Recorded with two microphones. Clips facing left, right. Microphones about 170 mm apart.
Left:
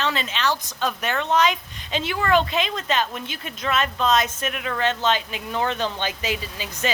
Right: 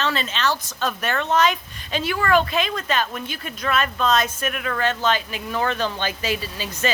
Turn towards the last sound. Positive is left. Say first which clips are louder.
# right 2 dB
turn(degrees=20)  # may be behind; listen again after turning